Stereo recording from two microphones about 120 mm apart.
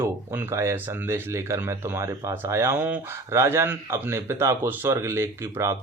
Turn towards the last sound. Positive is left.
turn(degrees=-20)  # may be behind; listen again after turning